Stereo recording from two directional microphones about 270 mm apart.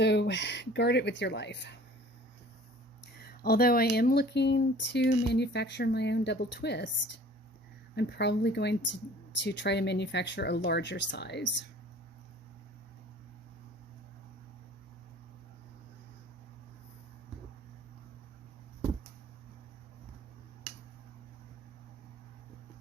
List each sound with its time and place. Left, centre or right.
0.0 s speech: left
3.0 s speech: left